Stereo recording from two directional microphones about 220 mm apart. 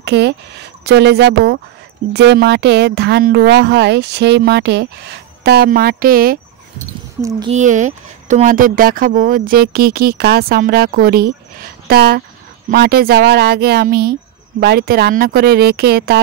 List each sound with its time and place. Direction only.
0.0 s speech: 50° right (ahead or behind)
7.2 s speech: 20° right (ahead or behind)
7.5 s speech: 35° right (ahead or behind)